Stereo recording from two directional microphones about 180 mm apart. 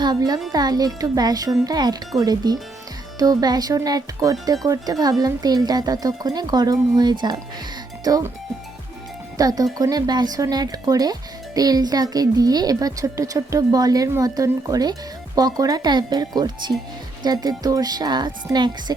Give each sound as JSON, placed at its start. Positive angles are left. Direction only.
{"t": 0.0, "sound": "a woman's voice", "side_deg": -20}
{"t": 9.4, "sound": "a woman's voice", "side_deg": -20}